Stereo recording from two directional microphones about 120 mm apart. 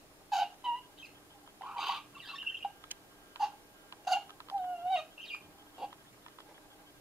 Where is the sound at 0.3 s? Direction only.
5° right (ahead or behind).